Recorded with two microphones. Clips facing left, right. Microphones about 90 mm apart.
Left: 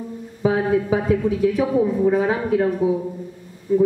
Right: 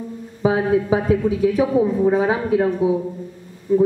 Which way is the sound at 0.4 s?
10° right (ahead or behind).